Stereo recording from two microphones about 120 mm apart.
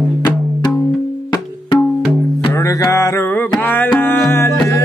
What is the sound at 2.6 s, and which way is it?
Music, 25° left (ahead or behind).